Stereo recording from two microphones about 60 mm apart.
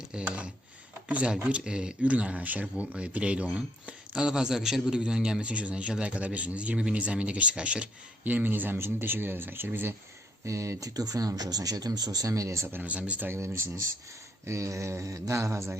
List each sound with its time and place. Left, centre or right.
0.1 s speech: centre
8.3 s speech: right
10.4 s speech: right
12.8 s speech: right
13.3 s speech: right